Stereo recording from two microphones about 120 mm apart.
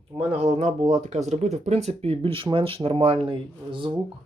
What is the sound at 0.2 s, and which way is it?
Speech, 55° right (ahead or behind).